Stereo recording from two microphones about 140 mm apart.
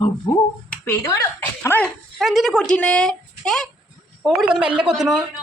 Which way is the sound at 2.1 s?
Centre (ahead or behind).